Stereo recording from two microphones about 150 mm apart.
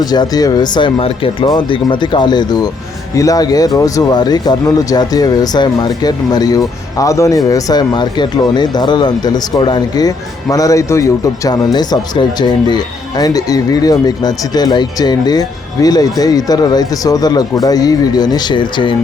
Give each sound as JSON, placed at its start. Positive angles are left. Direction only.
{"t": 0.0, "sound": "speech", "side_deg": 25}